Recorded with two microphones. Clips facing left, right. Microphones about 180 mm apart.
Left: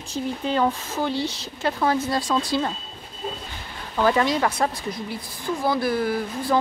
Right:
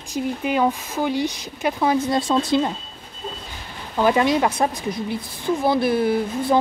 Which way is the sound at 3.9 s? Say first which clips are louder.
Right 3 dB; 15° right (ahead or behind).